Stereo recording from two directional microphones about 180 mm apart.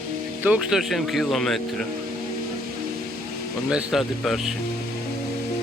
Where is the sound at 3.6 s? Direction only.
5° right (ahead or behind).